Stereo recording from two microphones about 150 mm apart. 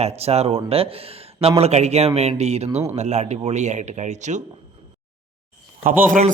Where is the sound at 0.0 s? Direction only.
45° right (ahead or behind).